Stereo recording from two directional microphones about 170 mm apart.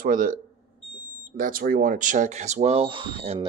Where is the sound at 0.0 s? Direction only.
55° right (ahead or behind); by 3.3 s 35° right (ahead or behind).